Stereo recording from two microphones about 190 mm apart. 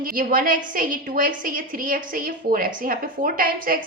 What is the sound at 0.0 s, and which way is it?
A woman's voice, 45° right (ahead or behind).